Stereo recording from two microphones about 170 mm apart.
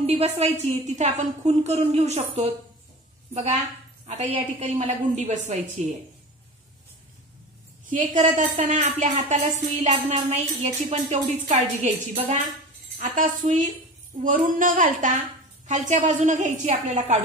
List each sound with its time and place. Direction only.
0.0 s a woman's voice: 40° right (ahead or behind)
4.0 s speech: 40° right (ahead or behind)
7.9 s speech: 50° right (ahead or behind)